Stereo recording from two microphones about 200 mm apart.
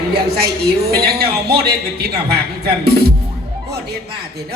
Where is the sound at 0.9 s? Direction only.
50° right (ahead or behind).